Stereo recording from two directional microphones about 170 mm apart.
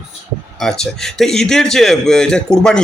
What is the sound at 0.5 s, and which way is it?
A man's voice, 5° left (ahead or behind).